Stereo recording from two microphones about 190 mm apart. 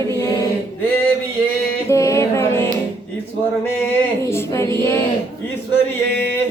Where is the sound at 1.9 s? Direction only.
15° left (ahead or behind).